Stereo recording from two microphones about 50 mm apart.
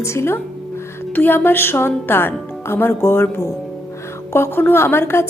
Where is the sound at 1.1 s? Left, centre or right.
Left.